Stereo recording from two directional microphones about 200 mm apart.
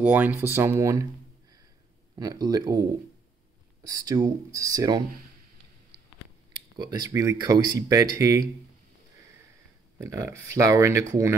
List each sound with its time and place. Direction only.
0.0 s speech: 10° right (ahead or behind)
2.1 s speech: 20° right (ahead or behind)
6.8 s speech: 20° right (ahead or behind)
9.9 s speech: 15° right (ahead or behind)